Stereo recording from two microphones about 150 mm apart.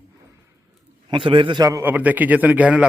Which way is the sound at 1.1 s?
35° right (ahead or behind).